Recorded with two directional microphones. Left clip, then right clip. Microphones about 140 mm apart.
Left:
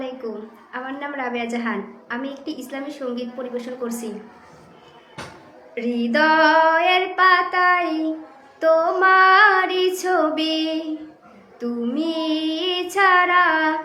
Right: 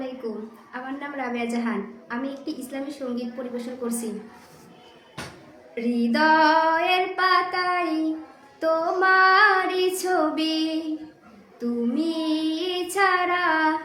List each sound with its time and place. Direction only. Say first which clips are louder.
0.2 s a woman's voice: left 2 dB; 20° right (ahead or behind)
5.7 s a woman's voice: left 3 dB; 25° right (ahead or behind)